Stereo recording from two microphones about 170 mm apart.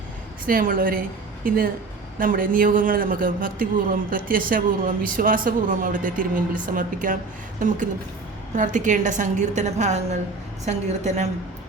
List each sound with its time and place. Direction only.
0.4 s a woman's voice: 55° right (ahead or behind)
8.5 s a man's voice: 45° right (ahead or behind)